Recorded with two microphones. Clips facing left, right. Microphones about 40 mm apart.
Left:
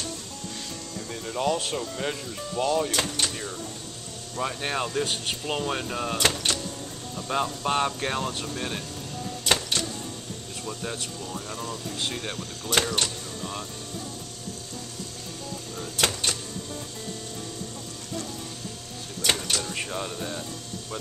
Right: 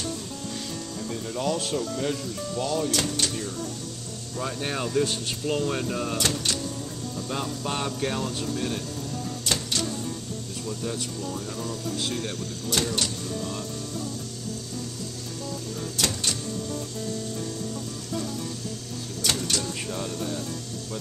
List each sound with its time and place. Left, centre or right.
1.1 s speech: centre
5.0 s speech: left; by 6.1 s centre
6.1 s speech: left
9.4 s a sound: left
10.7 s speech: left
16.0 s a sound: left
19.2 s music: left